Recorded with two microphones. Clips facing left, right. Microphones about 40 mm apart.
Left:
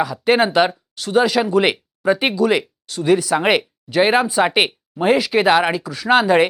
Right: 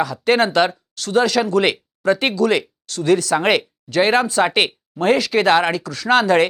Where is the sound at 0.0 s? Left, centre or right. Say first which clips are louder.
Left 1 dB; centre.